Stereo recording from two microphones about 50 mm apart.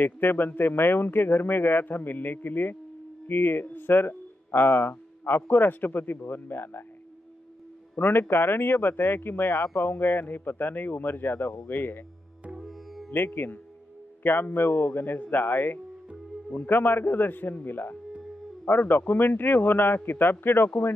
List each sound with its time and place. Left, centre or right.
0.0 s speech: left
8.0 s speech: left
12.6 s music: centre
13.1 s speech: left